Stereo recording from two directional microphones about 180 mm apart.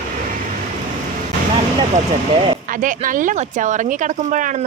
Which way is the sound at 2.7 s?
45° right (ahead or behind).